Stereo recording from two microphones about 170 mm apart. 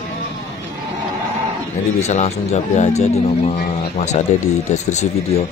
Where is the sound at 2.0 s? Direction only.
40° left (ahead or behind).